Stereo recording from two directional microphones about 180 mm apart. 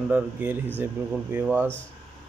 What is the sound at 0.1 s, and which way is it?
Speech, 10° right (ahead or behind).